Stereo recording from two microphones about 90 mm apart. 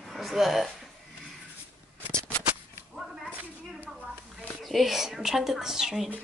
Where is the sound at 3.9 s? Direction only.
Centre (ahead or behind).